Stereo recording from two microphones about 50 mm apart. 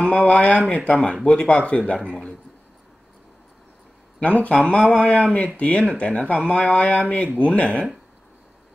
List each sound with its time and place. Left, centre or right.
0.0 s speech: left
4.2 s speech: left